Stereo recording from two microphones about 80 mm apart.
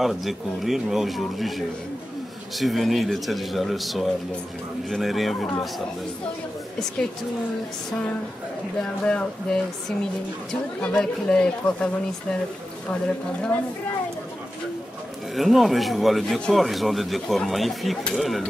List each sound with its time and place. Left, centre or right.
0.0 s speech: centre
9.0 s speech: centre
15.3 s speech: centre